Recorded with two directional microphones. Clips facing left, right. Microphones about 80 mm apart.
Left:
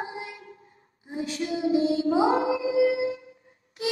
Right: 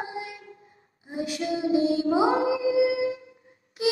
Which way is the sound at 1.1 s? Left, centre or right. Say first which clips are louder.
Right 1 dB; left.